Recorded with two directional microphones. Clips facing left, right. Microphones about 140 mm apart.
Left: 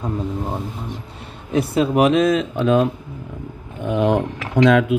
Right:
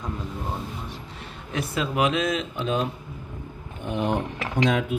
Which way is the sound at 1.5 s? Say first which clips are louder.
Left 10 dB; 30° left (ahead or behind).